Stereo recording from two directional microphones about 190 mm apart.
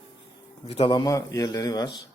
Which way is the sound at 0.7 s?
30° left (ahead or behind).